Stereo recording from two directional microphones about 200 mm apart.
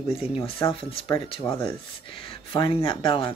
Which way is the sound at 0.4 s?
25° left (ahead or behind).